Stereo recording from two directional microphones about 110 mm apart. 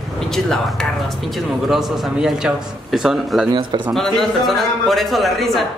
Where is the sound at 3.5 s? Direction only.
45° right (ahead or behind).